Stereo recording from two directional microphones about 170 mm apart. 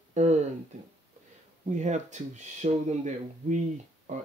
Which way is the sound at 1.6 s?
45° right (ahead or behind).